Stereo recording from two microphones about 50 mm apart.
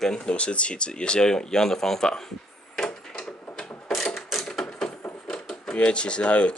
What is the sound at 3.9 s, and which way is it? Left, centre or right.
Mechanisms, centre.